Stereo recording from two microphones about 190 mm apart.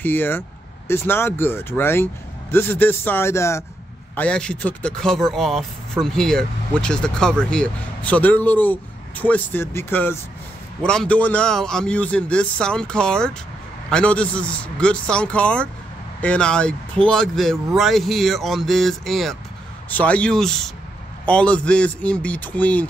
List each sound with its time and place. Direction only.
0.0 s a man's voice: 10° left (ahead or behind)